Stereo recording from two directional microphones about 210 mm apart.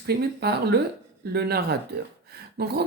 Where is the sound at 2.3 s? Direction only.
50° right (ahead or behind).